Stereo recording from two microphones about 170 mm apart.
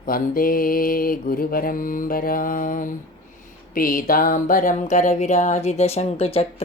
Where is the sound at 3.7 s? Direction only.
55° left (ahead or behind).